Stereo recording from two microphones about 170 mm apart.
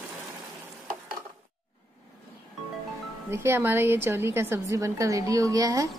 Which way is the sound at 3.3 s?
15° right (ahead or behind).